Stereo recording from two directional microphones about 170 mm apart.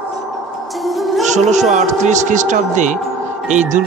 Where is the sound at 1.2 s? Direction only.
45° right (ahead or behind).